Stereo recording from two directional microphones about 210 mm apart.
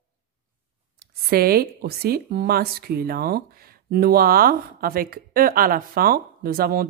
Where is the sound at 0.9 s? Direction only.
45° right (ahead or behind).